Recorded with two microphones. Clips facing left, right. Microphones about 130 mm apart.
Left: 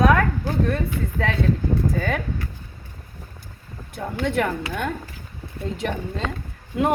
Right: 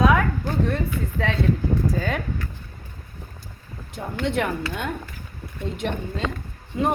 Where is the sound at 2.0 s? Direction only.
55° left (ahead or behind).